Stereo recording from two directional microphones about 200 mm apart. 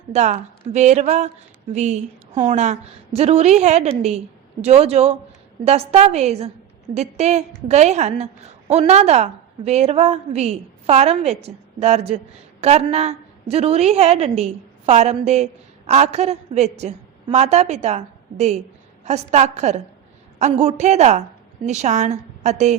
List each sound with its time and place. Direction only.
0.1 s a woman's voice: 35° right (ahead or behind)